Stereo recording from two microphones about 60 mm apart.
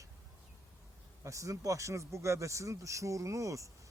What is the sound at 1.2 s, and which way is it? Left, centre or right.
Speech, right.